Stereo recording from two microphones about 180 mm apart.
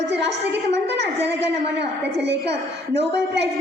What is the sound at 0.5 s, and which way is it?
A woman's voice, 75° right (ahead or behind).